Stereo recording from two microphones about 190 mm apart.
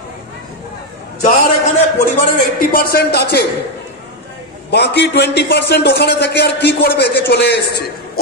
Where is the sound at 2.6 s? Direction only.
50° left (ahead or behind).